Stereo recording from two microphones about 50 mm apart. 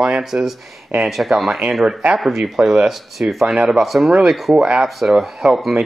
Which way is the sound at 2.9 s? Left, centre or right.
Centre.